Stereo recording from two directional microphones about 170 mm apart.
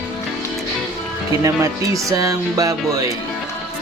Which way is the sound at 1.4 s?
20° right (ahead or behind).